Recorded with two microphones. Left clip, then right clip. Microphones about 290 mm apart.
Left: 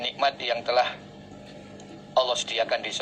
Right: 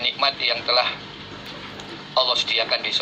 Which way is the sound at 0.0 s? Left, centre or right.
Left.